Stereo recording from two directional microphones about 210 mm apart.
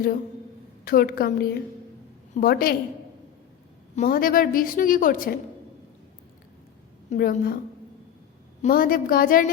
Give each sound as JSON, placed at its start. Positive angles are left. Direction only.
{"t": 0.9, "sound": "a woman's voice", "side_deg": 45}
{"t": 3.9, "sound": "a woman's voice", "side_deg": 40}
{"t": 7.1, "sound": "a woman's voice", "side_deg": 45}
{"t": 8.6, "sound": "a woman's voice", "side_deg": 45}